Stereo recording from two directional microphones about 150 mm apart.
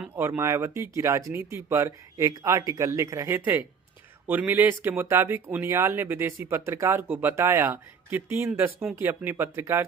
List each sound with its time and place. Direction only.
0.2 s speech: 20° right (ahead or behind)